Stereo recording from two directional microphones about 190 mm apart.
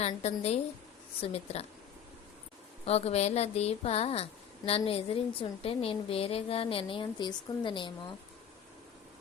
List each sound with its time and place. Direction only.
0.0 s speech: 35° left (ahead or behind)
2.8 s speech: 35° left (ahead or behind)